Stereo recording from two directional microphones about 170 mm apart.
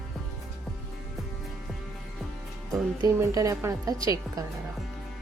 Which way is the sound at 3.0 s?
20° right (ahead or behind).